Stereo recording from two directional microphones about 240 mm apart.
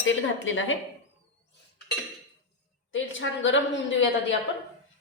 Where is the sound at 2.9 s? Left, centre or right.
Left.